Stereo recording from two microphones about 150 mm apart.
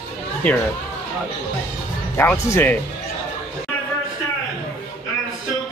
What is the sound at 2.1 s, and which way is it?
Speech, 15° left (ahead or behind).